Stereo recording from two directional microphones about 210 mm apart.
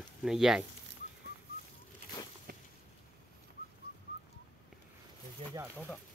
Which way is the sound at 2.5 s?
45° right (ahead or behind).